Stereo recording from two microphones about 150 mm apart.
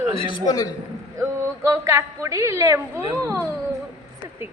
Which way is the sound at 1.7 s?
20° right (ahead or behind).